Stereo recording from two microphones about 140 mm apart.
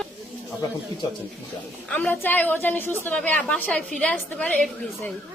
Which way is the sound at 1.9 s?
10° left (ahead or behind).